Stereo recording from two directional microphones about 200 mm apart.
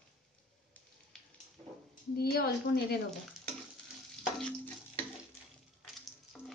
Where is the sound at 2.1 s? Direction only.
50° left (ahead or behind).